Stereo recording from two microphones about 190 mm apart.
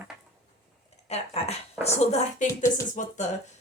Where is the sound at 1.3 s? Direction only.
35° left (ahead or behind).